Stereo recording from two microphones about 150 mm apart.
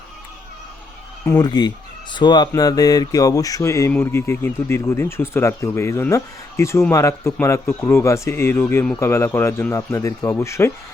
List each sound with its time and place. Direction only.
1.4 s speech: 30° left (ahead or behind)